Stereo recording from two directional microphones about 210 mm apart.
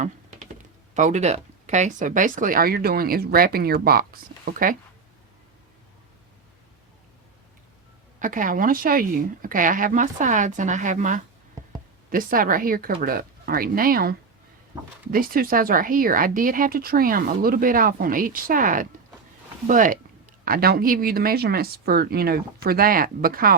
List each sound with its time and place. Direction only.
0.0 s computer keyboard: 35° right (ahead or behind)
1.6 s speech: 35° right (ahead or behind)
8.2 s speech: 40° right (ahead or behind)